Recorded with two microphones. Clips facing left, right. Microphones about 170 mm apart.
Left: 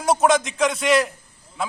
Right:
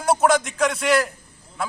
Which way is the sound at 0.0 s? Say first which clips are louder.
Even; centre (ahead or behind).